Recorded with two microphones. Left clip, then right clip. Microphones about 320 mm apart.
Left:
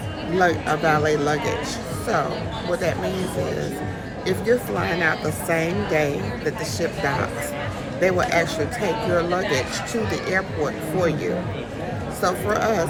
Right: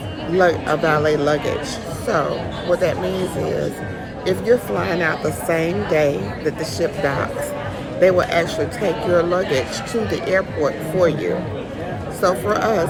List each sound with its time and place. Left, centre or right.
0.3 s speech: centre
4.3 s speech: centre